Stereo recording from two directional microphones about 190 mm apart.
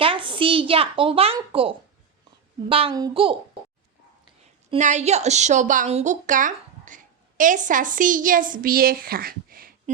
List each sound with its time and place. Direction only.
0.0 s speech: 25° right (ahead or behind)
4.8 s a woman's voice: 40° right (ahead or behind)